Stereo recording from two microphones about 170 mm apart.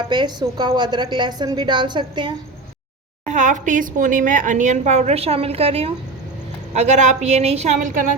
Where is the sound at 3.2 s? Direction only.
45° right (ahead or behind).